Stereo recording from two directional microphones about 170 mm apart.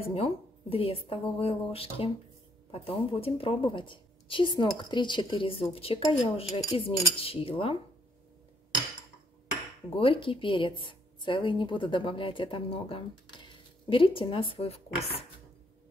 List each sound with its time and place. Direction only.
0.0 s speech: 35° left (ahead or behind)
9.9 s speech: 30° left (ahead or behind)